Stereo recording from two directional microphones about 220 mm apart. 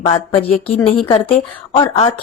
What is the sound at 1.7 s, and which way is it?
Speech, 25° left (ahead or behind).